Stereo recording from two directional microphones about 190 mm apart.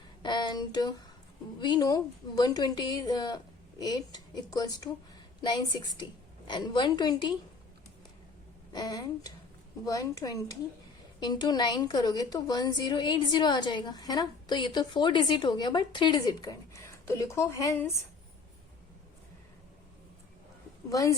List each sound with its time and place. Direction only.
0.2 s a sound: 25° left (ahead or behind)
1.6 s a woman's voice: 20° left (ahead or behind)
8.7 s a woman's voice: 20° left (ahead or behind)
20.9 s speech: 20° left (ahead or behind)